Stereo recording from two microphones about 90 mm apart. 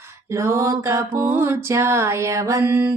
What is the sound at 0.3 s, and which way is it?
Mantra, 30° right (ahead or behind).